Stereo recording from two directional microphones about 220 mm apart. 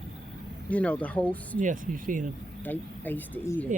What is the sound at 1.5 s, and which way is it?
Speech, 35° right (ahead or behind).